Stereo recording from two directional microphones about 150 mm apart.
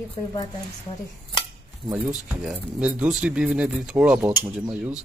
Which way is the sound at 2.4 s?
5° right (ahead or behind).